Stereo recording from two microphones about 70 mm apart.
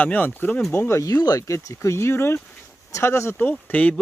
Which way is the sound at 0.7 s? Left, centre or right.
Left.